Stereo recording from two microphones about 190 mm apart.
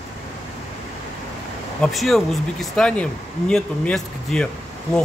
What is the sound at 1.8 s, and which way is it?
Speech, centre (ahead or behind).